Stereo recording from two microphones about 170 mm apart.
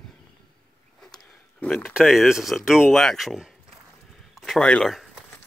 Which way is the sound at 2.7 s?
5° right (ahead or behind).